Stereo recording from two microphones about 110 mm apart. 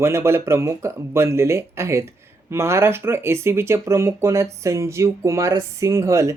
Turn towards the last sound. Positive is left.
turn(degrees=-25)  # may be behind; listen again after turning